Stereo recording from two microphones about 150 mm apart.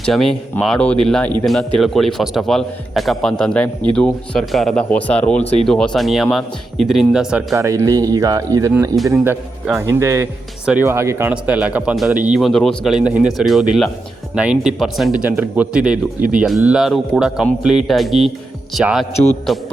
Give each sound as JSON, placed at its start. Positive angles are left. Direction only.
{"t": 0.0, "sound": "speech", "side_deg": 5}
{"t": 7.5, "sound": "speech", "side_deg": -20}
{"t": 19.1, "sound": "a man's voice", "side_deg": 45}